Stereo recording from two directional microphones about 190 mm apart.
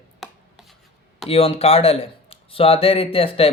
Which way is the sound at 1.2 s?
30° left (ahead or behind).